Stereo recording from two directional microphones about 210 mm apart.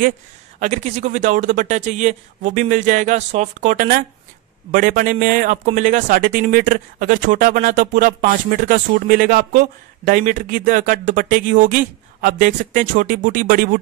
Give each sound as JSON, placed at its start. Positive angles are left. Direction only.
{"t": 0.6, "sound": "speech", "side_deg": -35}